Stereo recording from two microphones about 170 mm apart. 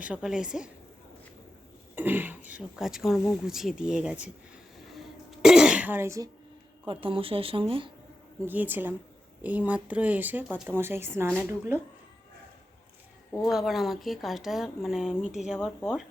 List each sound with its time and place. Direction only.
0.0 s speech: 5° right (ahead or behind)
2.0 s speech: 10° right (ahead or behind)
4.9 s throat clearing: centre (ahead or behind); by 6.3 s 20° right (ahead or behind)
6.8 s speech: 30° right (ahead or behind)
8.4 s speech: 10° right (ahead or behind)
13.4 s speech: centre (ahead or behind)